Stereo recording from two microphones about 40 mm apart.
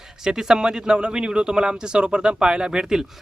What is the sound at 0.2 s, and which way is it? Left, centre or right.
Speech, centre.